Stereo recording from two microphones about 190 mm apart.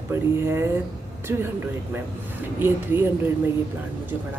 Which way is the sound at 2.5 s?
10° right (ahead or behind).